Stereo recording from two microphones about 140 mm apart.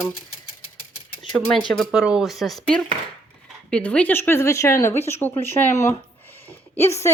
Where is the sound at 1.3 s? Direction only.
Centre (ahead or behind).